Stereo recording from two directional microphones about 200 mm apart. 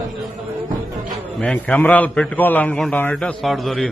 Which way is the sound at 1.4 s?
5° left (ahead or behind).